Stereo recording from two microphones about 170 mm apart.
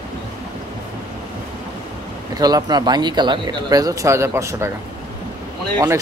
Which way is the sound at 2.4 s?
20° right (ahead or behind).